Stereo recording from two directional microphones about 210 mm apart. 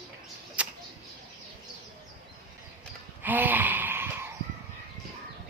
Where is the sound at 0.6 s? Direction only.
5° right (ahead or behind).